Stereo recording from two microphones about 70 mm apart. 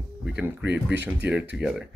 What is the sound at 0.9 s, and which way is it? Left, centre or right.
Speech, centre.